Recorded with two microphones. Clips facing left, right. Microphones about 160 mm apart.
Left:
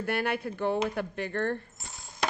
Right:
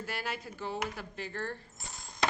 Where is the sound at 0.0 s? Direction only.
60° left (ahead or behind).